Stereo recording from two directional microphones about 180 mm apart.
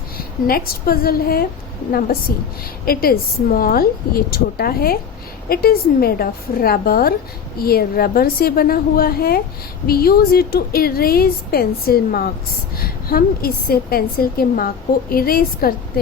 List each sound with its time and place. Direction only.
0.2 s a woman's voice: 55° left (ahead or behind)